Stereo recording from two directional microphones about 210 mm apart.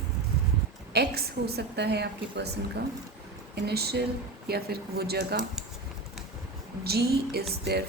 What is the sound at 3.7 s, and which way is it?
A woman's voice, 50° right (ahead or behind).